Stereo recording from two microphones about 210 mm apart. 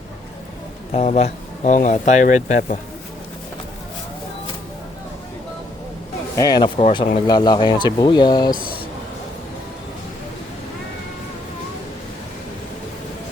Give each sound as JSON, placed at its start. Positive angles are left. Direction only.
{"t": 0.9, "sound": "speech", "side_deg": 30}
{"t": 6.3, "sound": "speech", "side_deg": 20}
{"t": 8.5, "sound": "speech", "side_deg": 45}